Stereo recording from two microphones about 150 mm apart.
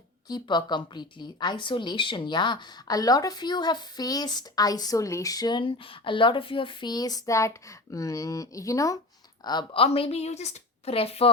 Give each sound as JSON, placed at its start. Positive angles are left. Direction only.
{"t": 0.3, "sound": "a woman's voice", "side_deg": 30}